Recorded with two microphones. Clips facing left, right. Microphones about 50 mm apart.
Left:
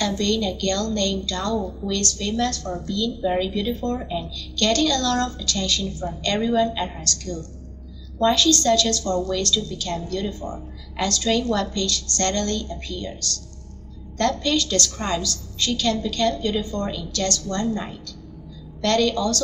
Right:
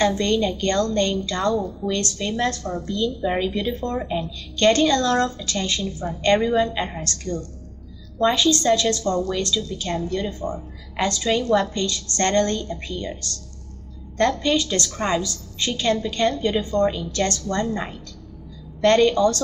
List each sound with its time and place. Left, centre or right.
0.0 s a woman's voice: right